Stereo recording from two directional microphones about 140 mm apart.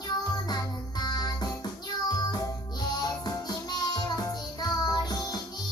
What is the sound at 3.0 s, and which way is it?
Music, 30° left (ahead or behind).